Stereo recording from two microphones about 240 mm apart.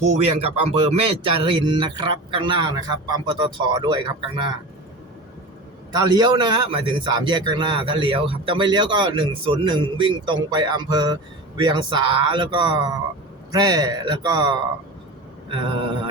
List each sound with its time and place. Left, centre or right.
0.0 s a man's voice: right
5.9 s a man's voice: centre